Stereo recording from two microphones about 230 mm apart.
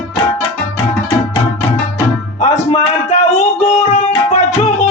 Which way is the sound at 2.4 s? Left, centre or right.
Left.